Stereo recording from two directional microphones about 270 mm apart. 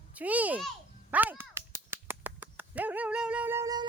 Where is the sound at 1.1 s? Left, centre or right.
Centre.